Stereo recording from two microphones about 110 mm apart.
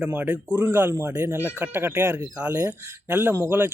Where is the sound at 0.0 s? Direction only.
15° right (ahead or behind).